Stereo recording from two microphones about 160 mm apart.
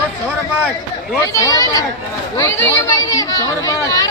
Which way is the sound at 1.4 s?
20° left (ahead or behind).